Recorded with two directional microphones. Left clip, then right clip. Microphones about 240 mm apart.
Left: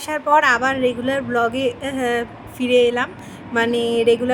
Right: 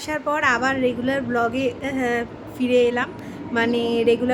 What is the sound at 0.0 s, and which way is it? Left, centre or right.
A woman's voice, centre.